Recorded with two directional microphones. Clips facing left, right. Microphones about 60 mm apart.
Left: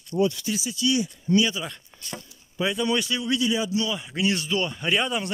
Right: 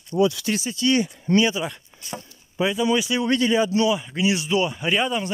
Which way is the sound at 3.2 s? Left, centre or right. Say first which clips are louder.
Right 5 dB; right.